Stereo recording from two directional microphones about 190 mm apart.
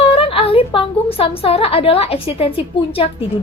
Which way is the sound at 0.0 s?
30° left (ahead or behind).